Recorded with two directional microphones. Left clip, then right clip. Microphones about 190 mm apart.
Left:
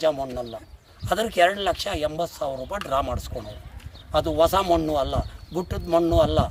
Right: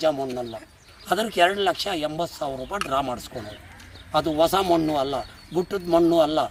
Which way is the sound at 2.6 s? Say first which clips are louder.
Right 2 dB; 15° left (ahead or behind).